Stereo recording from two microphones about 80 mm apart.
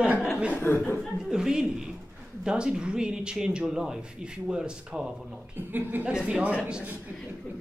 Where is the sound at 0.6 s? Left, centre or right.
Left.